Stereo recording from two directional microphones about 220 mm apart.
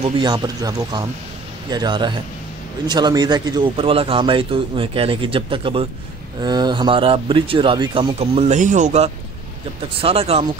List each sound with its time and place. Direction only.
0.0 s a man's voice: 20° right (ahead or behind)